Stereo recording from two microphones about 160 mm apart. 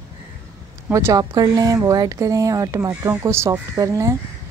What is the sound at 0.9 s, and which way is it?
Speech, 20° right (ahead or behind).